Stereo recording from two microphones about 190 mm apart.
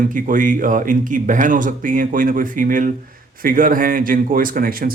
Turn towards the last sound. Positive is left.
turn(degrees=-50)  # may be behind; listen again after turning